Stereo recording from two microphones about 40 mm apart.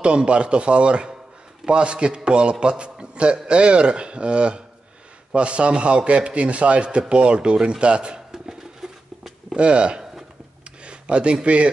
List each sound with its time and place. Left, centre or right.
0.0 s a man's voice: right
8.3 s a sound: centre
9.6 s a man's voice: right